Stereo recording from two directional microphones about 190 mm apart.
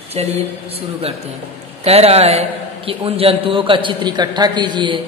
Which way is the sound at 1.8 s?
30° right (ahead or behind).